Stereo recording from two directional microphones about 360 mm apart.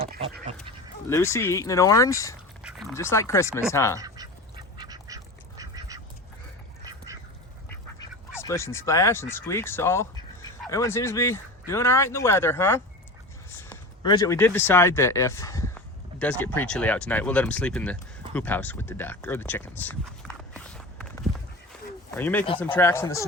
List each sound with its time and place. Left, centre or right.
0.0 s goat: centre
0.3 s speech: right
1.1 s speech: centre
3.9 s duck: centre
8.3 s speech: centre
13.6 s a sound: centre
16.4 s speech: centre
22.1 s speech: centre